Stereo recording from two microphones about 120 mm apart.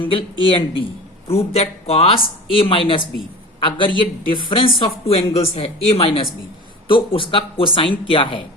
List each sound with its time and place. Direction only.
0.0 s speech: 45° left (ahead or behind)